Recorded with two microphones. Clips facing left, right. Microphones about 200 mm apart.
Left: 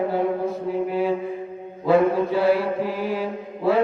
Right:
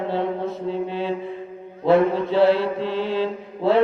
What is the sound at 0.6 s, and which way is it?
Mantra, 25° right (ahead or behind).